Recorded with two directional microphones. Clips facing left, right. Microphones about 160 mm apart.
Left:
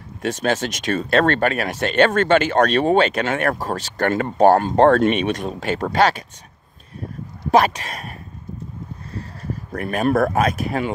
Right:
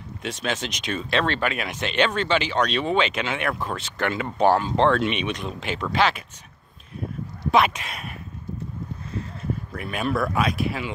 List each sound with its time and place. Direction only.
0.2 s speech: 45° left (ahead or behind)
7.5 s speech: 40° left (ahead or behind)
9.4 s speech: 45° left (ahead or behind)